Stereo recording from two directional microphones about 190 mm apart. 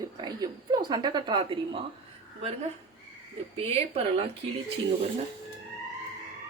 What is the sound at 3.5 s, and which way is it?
Speech, 30° right (ahead or behind).